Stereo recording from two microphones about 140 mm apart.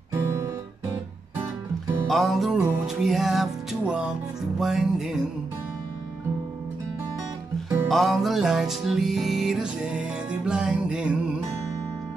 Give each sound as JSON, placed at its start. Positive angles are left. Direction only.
{"t": 0.1, "sound": "guitar", "side_deg": -20}
{"t": 2.0, "sound": "music", "side_deg": 0}
{"t": 7.9, "sound": "music", "side_deg": 0}